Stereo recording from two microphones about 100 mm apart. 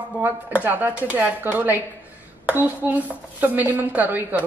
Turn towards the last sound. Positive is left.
turn(degrees=-15)  # may be behind; listen again after turning